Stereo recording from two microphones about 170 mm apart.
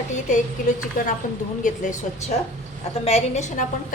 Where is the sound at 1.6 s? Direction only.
50° left (ahead or behind).